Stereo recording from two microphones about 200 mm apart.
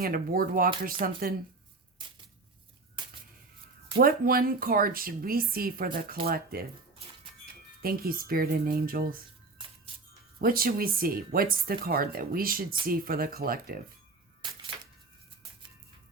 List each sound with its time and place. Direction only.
0.0 s speech: 45° right (ahead or behind)
3.9 s speech: 45° right (ahead or behind)
7.8 s speech: 45° right (ahead or behind)
9.9 s music: 25° right (ahead or behind)
10.4 s speech: 45° right (ahead or behind)